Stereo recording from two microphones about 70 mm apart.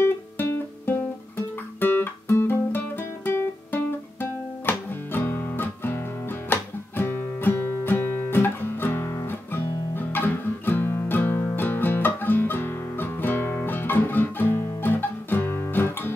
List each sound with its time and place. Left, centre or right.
0.0 s music: left
1.8 s guitar: left
3.3 s music: left